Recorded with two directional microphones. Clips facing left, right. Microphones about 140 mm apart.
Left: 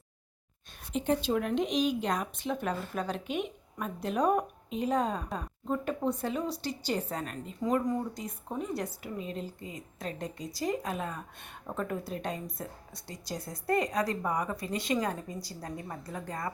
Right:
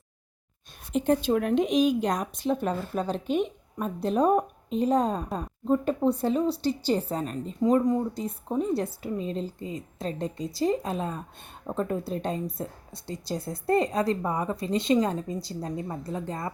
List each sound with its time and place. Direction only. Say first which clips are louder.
0.9 s a woman's voice: right 5 dB; 45° right (ahead or behind); by 16.5 s 25° right (ahead or behind)